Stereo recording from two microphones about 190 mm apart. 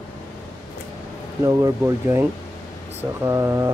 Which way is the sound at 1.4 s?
15° right (ahead or behind).